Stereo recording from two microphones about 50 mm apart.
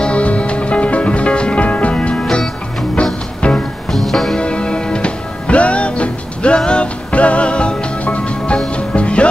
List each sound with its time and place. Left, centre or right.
0.0 s music: left
3.4 s music: left
3.9 s music: centre
4.4 s music: left